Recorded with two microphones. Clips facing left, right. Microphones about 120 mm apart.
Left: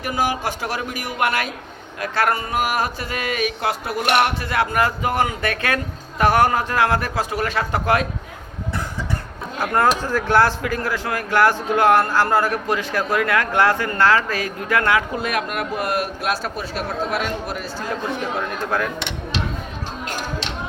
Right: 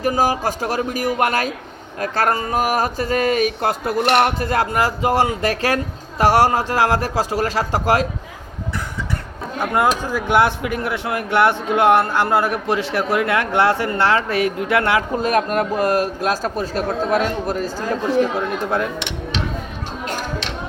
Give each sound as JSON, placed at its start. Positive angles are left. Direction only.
{"t": 0.0, "sound": "speech", "side_deg": -40}
{"t": 9.6, "sound": "a man's voice", "side_deg": -15}
{"t": 15.2, "sound": "speech", "side_deg": -35}
{"t": 18.3, "sound": "a man's voice", "side_deg": -30}